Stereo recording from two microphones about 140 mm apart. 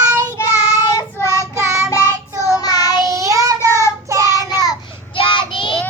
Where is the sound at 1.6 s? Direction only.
20° right (ahead or behind).